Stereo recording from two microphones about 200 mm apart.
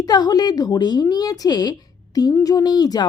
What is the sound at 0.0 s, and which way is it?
A woman's voice, 20° left (ahead or behind).